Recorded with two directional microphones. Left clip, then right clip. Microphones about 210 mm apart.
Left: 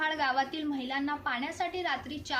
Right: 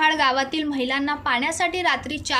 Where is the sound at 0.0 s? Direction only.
50° right (ahead or behind).